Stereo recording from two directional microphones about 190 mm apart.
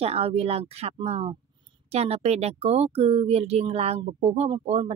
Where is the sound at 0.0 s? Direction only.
30° right (ahead or behind).